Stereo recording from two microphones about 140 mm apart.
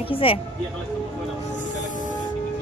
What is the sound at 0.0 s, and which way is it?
Speech, 40° left (ahead or behind).